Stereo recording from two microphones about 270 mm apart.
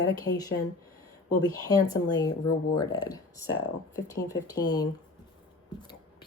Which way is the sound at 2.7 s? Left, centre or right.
Centre.